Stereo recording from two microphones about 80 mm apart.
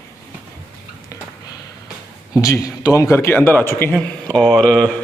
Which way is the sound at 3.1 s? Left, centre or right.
Left.